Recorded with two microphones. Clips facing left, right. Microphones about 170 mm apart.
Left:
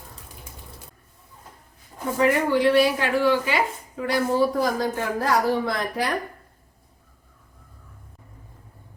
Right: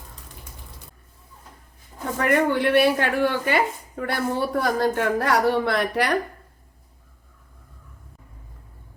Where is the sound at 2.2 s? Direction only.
60° right (ahead or behind).